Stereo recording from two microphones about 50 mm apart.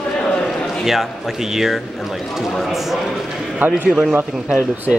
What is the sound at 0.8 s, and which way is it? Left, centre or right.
A man's voice, centre.